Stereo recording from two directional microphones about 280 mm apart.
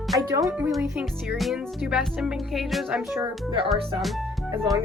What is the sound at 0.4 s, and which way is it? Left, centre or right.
Speech, centre.